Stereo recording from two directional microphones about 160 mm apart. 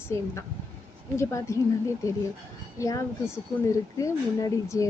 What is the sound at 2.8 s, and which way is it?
A woman's voice, 20° left (ahead or behind).